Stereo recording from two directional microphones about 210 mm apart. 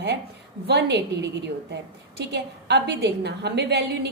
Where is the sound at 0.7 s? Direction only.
55° right (ahead or behind).